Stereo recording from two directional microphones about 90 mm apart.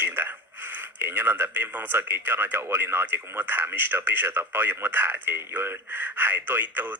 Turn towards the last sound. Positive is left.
turn(degrees=-20)  # may be behind; listen again after turning